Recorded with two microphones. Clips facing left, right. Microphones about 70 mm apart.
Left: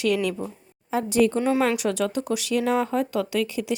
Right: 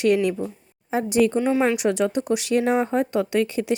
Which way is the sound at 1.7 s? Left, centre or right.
Centre.